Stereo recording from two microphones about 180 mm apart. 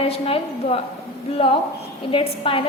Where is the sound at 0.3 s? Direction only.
30° left (ahead or behind).